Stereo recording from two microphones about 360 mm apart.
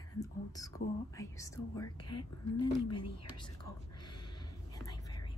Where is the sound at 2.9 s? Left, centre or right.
Centre.